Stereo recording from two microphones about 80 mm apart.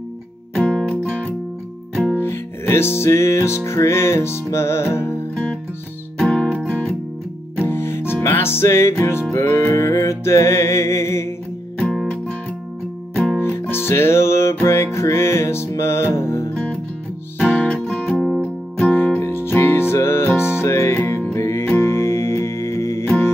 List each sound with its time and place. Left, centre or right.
0.6 s music: centre
2.2 s music: left
6.1 s music: centre
7.5 s music: left
11.9 s music: centre
13.4 s music: left
17.5 s music: centre
17.8 s music: centre
18.9 s music: left